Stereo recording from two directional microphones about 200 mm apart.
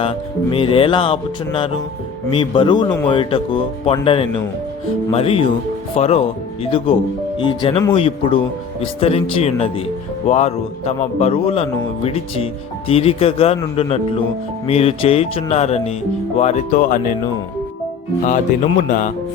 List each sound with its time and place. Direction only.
0.0 s a man's voice: 30° left (ahead or behind); by 17.2 s 45° left (ahead or behind)
18.3 s a man's voice: 40° left (ahead or behind)